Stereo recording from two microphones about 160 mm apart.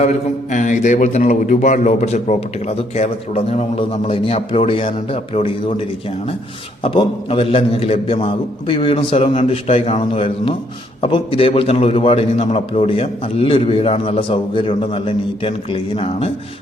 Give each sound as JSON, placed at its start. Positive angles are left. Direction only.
{"t": 0.5, "sound": "a man's voice", "side_deg": 50}
{"t": 6.8, "sound": "a man's voice", "side_deg": 35}